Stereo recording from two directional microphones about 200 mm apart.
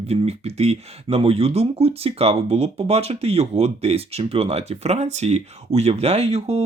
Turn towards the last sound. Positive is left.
turn(degrees=-30)  # may be behind; listen again after turning